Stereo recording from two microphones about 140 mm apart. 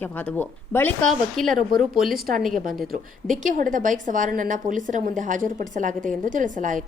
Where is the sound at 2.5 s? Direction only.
75° right (ahead or behind).